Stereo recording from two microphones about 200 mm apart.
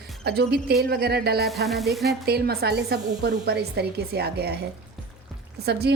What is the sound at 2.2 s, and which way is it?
A woman's voice, 50° right (ahead or behind).